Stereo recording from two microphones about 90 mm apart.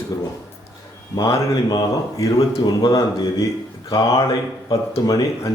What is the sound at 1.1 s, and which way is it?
Speech, 45° left (ahead or behind).